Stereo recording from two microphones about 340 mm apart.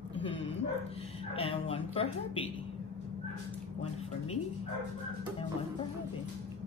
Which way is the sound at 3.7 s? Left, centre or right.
Centre.